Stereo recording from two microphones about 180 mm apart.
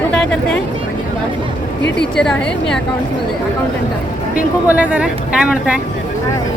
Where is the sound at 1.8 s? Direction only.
70° left (ahead or behind).